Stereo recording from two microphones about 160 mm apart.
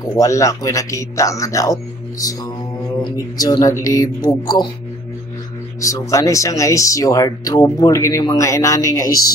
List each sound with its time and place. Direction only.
0.1 s speech: 20° left (ahead or behind)
5.8 s speech: 20° left (ahead or behind)